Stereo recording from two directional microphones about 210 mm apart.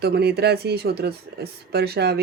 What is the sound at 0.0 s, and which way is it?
Speech, 50° right (ahead or behind).